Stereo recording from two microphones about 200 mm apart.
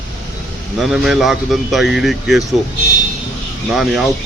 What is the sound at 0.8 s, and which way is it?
Speech, centre (ahead or behind).